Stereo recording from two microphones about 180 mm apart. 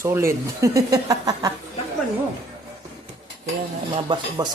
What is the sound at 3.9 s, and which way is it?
Speech, 25° right (ahead or behind).